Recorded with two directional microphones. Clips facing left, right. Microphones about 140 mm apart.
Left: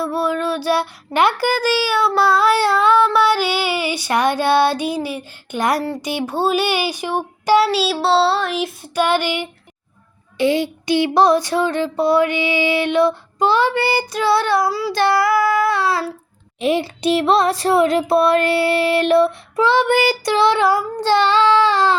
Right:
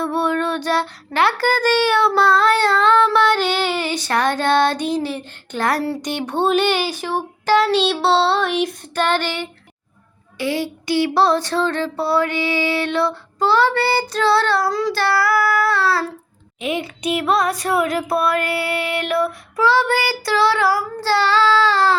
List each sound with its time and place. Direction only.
0.0 s child singing: 5° left (ahead or behind)
5.8 s child singing: 5° left (ahead or behind)
14.9 s child singing: 20° left (ahead or behind)
16.6 s a sound: 35° left (ahead or behind); by 21.9 s 20° left (ahead or behind)